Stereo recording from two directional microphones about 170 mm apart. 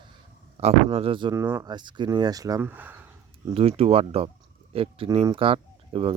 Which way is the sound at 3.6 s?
35° right (ahead or behind).